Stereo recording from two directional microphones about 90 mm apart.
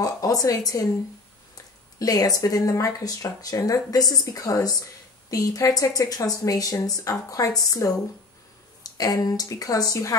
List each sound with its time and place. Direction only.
0.0 s speech: 40° left (ahead or behind)
2.0 s a woman's voice: 45° left (ahead or behind)